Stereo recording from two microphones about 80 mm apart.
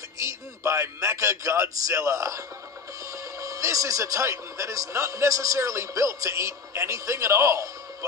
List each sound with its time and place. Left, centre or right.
0.2 s a man's voice: right